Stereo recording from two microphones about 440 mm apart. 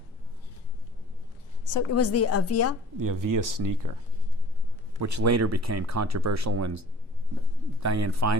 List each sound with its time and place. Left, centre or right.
1.6 s a woman's voice: left
3.0 s speech: right
4.9 s speech: right